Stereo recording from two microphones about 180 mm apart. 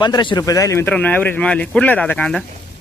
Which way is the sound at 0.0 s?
25° left (ahead or behind).